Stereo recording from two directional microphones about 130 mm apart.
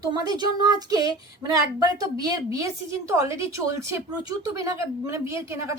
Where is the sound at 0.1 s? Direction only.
30° right (ahead or behind).